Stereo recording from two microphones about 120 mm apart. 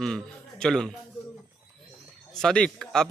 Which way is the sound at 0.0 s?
5° left (ahead or behind).